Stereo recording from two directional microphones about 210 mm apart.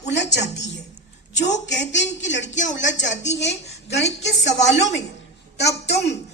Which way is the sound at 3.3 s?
30° left (ahead or behind).